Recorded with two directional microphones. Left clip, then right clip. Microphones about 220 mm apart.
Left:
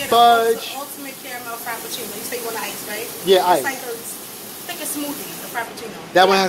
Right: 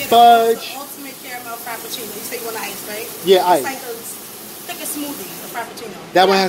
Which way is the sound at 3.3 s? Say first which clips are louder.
Right 2 dB; 35° right (ahead or behind).